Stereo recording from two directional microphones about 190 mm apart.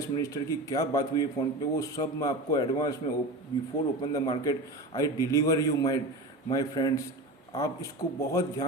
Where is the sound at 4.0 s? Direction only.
25° left (ahead or behind).